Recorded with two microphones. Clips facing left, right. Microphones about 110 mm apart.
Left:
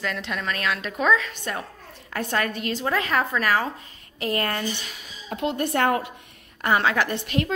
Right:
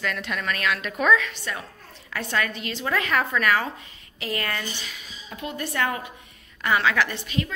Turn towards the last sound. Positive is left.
turn(degrees=60)  # may be behind; listen again after turning